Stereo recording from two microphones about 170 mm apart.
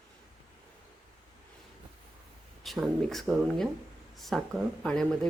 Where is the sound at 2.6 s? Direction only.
Centre (ahead or behind).